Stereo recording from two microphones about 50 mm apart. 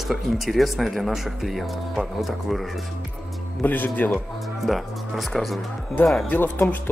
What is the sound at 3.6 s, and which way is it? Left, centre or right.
Speech, left.